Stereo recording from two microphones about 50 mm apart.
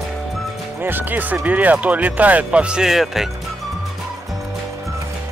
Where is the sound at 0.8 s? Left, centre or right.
Right.